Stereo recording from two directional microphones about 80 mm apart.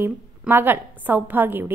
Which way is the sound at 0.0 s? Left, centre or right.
Right.